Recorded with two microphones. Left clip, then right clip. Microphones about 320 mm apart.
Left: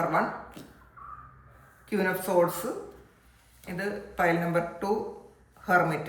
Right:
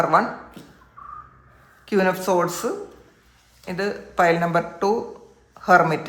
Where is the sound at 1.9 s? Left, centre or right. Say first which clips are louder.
Right 7 dB; centre.